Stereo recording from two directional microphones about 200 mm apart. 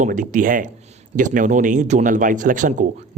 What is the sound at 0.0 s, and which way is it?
Speech, 40° right (ahead or behind).